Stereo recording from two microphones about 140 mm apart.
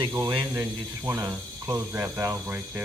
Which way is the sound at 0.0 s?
30° right (ahead or behind).